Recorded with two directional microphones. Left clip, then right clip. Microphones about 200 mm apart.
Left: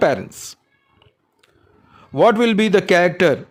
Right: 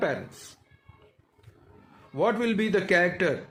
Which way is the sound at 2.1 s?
60° left (ahead or behind).